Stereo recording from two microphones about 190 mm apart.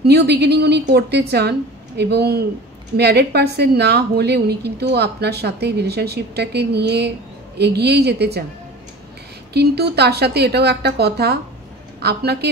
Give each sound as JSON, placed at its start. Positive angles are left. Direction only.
{"t": 0.0, "sound": "a woman's voice", "side_deg": -60}
{"t": 9.5, "sound": "a woman's voice", "side_deg": -60}